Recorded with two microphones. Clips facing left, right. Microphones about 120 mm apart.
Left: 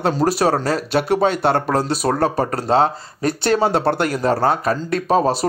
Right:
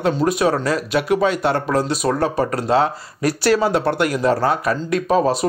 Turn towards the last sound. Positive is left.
turn(degrees=35)  # may be behind; listen again after turning